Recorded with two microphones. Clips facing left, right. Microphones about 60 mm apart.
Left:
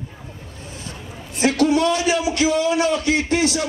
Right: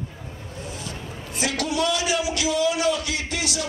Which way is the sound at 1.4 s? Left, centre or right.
Left.